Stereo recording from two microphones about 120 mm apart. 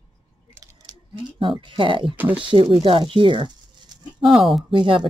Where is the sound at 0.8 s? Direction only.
40° right (ahead or behind).